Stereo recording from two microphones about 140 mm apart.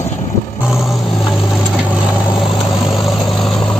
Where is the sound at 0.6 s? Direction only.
Centre (ahead or behind).